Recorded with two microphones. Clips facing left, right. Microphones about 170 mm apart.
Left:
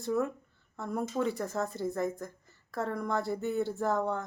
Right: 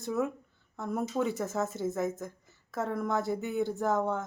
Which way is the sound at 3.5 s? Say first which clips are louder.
Left 1 dB; 15° right (ahead or behind).